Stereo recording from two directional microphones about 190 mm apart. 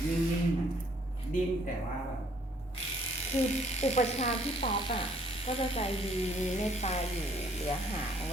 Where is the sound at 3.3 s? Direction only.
35° left (ahead or behind).